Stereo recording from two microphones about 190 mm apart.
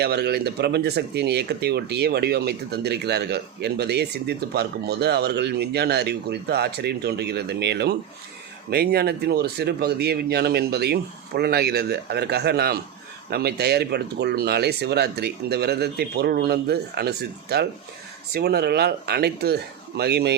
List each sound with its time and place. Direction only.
0.0 s speech: 60° right (ahead or behind)